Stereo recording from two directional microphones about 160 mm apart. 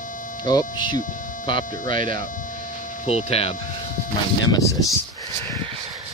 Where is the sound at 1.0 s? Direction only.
55° left (ahead or behind).